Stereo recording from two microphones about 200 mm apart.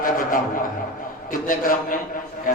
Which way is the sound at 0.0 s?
45° left (ahead or behind).